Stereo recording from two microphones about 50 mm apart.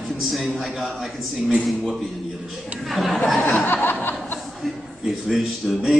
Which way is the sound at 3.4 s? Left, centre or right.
Left.